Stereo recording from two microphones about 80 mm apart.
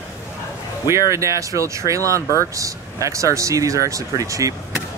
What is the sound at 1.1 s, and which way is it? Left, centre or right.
Speech, right.